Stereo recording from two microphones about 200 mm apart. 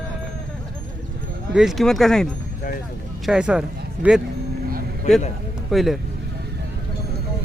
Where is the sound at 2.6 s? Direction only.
45° left (ahead or behind).